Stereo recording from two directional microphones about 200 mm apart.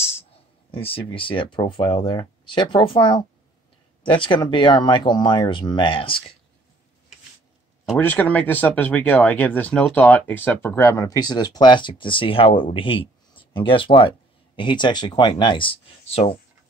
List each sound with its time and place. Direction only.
0.7 s speech: 25° left (ahead or behind)
8.0 s speech: 10° left (ahead or behind); by 16.3 s 30° left (ahead or behind)